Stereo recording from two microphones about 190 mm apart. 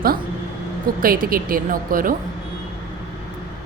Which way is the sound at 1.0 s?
50° right (ahead or behind).